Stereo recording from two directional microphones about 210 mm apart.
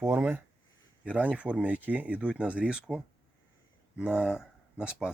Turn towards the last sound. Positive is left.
turn(degrees=-5)  # may be behind; listen again after turning